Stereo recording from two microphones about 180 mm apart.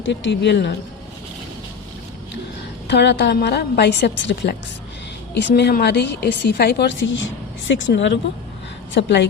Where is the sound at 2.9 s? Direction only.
70° left (ahead or behind).